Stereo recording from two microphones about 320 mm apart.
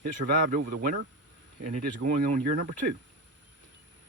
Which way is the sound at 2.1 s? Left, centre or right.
Right.